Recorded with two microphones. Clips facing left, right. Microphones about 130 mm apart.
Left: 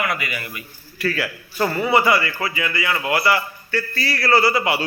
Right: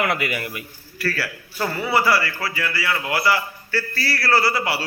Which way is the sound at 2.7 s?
Centre (ahead or behind).